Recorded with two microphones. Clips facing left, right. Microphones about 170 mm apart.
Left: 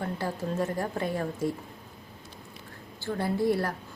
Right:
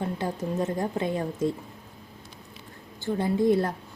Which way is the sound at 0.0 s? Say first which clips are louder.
Right 2 dB; 20° right (ahead or behind).